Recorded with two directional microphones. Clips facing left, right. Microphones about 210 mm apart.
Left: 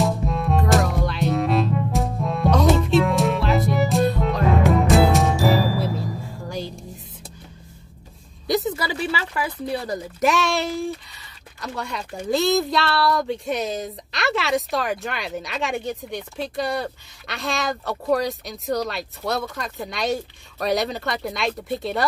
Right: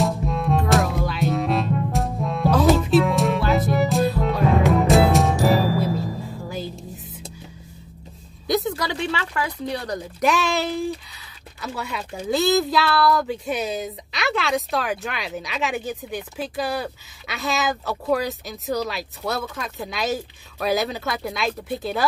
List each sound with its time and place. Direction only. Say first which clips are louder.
0.0 s music: even; centre (ahead or behind)
8.5 s speech: even; 5° left (ahead or behind)